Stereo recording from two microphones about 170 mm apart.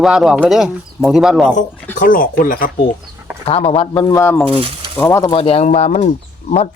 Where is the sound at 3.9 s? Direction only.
20° left (ahead or behind).